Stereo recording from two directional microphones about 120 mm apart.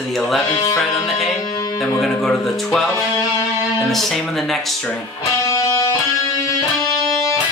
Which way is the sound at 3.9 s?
Centre (ahead or behind).